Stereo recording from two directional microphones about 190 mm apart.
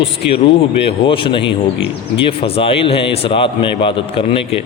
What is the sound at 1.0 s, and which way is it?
A man's voice, 25° left (ahead or behind).